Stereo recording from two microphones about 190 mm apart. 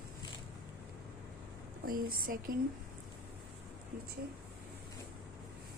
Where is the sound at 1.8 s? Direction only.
50° right (ahead or behind).